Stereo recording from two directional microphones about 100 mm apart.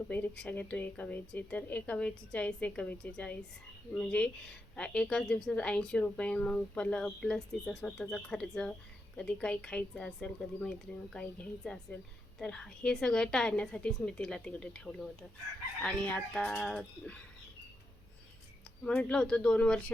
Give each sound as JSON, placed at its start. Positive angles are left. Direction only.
{"t": 0.1, "sound": "a woman's voice", "side_deg": 15}
{"t": 18.8, "sound": "a woman's voice", "side_deg": 10}